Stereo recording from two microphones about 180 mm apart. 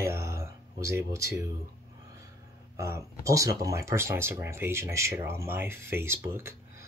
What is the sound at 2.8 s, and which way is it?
Speech, 15° right (ahead or behind).